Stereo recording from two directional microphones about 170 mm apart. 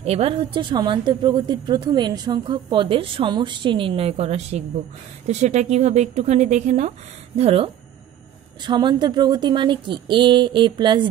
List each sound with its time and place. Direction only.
0.0 s a woman's voice: 35° right (ahead or behind)